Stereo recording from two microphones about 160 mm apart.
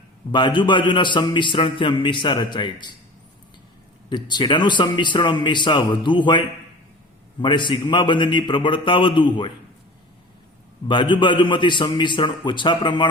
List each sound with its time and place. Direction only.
0.3 s a man's voice: 30° left (ahead or behind)
4.1 s a man's voice: 30° left (ahead or behind)
7.4 s a man's voice: 30° left (ahead or behind)
10.8 s a man's voice: 30° left (ahead or behind)